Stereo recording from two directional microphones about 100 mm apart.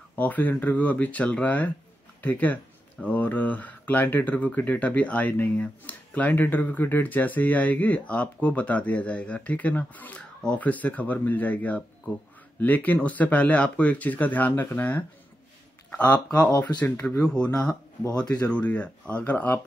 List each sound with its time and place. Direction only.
0.1 s speech: 15° left (ahead or behind)